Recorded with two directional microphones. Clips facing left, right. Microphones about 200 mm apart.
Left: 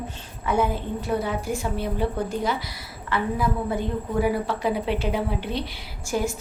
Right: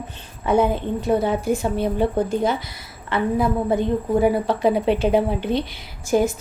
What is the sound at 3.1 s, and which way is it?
A woman's voice, 25° right (ahead or behind).